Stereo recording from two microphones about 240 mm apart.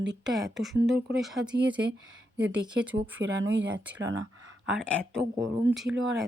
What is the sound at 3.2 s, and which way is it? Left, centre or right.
Speech, right.